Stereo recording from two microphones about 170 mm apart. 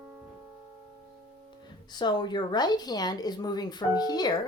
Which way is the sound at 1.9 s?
25° left (ahead or behind).